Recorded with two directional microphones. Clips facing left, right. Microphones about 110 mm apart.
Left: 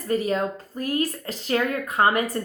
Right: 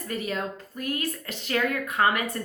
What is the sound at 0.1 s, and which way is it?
Speech, 35° left (ahead or behind).